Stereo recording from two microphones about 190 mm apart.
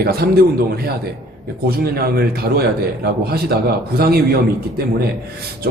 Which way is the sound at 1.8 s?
55° right (ahead or behind).